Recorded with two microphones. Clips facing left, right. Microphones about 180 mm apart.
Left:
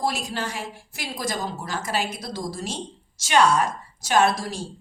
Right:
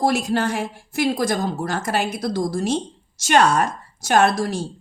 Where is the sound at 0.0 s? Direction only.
55° right (ahead or behind).